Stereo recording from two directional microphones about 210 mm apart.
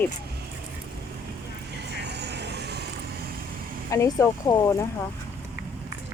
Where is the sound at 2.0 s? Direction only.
55° right (ahead or behind).